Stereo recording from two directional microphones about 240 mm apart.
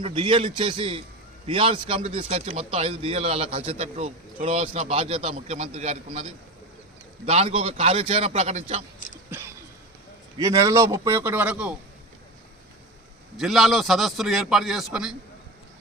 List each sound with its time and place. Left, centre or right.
0.0 s a man's voice: right
7.3 s a man's voice: right
10.3 s a man's voice: centre
13.3 s a man's voice: centre